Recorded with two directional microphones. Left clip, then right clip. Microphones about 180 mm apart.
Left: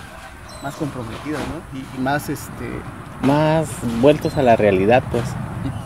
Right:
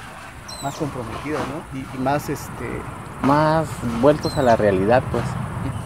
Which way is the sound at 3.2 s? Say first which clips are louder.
Even; 35° left (ahead or behind).